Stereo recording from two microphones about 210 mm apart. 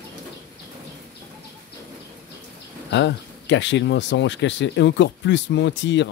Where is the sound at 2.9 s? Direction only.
55° left (ahead or behind).